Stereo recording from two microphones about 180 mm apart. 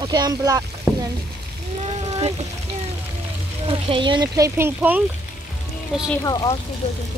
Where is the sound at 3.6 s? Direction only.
30° right (ahead or behind).